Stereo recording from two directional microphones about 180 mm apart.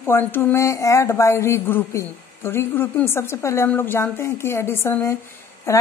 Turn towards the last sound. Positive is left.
turn(degrees=15)  # may be behind; listen again after turning